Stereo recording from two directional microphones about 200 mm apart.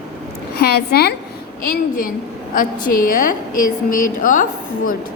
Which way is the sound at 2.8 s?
40° left (ahead or behind).